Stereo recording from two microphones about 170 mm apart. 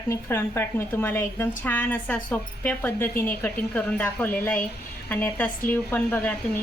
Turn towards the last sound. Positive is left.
turn(degrees=10)  # may be behind; listen again after turning